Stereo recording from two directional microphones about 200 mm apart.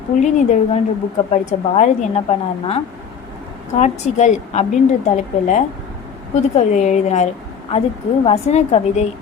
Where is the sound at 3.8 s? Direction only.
35° left (ahead or behind).